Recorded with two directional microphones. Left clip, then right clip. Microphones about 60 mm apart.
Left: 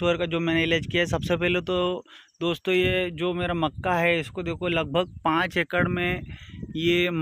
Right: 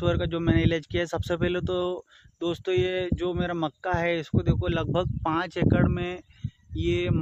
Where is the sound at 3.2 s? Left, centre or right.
Right.